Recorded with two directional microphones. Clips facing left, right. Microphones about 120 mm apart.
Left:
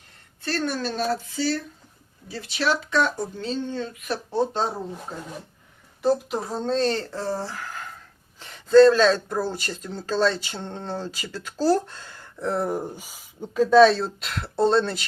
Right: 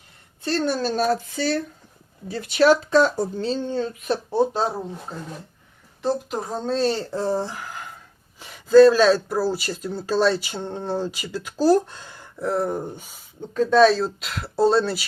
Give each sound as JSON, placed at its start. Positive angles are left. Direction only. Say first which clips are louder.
{"t": 0.4, "sound": "speech", "louder": "right 4 dB", "side_deg": -25}
{"t": 4.3, "sound": "speech", "louder": "right 2 dB", "side_deg": -10}
{"t": 6.0, "sound": "speech", "louder": "left 2 dB", "side_deg": 0}
{"t": 12.4, "sound": "speech", "louder": "right 2 dB", "side_deg": 0}